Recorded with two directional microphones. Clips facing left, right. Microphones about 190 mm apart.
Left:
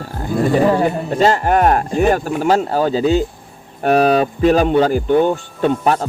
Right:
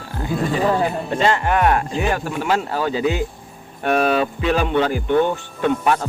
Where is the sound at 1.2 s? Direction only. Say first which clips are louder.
Left 4 dB; 40° left (ahead or behind).